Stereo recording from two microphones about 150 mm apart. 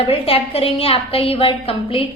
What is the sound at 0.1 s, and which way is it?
A woman's voice, 40° left (ahead or behind).